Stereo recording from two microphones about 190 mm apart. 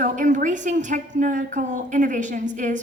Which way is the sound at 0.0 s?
45° right (ahead or behind).